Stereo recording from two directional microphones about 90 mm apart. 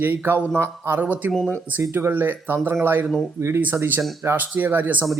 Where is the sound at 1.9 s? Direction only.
20° right (ahead or behind).